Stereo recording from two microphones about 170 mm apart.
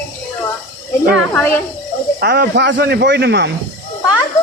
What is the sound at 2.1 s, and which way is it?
Speech, 65° right (ahead or behind).